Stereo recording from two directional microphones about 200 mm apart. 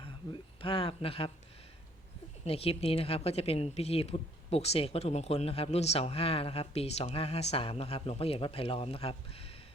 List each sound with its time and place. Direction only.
0.6 s a woman's voice: 25° left (ahead or behind)
2.4 s a woman's voice: 30° left (ahead or behind)